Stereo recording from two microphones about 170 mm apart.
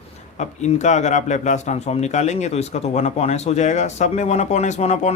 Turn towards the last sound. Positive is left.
turn(degrees=40)  # may be behind; listen again after turning